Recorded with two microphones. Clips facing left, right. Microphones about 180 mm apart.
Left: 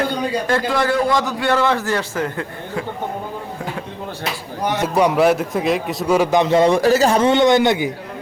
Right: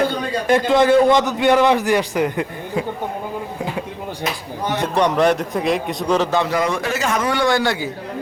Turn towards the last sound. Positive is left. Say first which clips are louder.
# left 4 dB
turn(degrees=20)  # may be behind; listen again after turning